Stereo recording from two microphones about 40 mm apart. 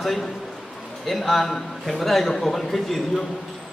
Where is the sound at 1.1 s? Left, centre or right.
Centre.